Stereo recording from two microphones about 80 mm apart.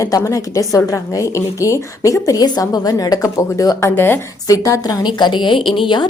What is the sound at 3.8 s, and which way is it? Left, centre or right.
Speech, left.